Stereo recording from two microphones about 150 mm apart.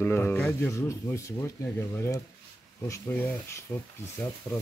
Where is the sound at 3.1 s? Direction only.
15° left (ahead or behind).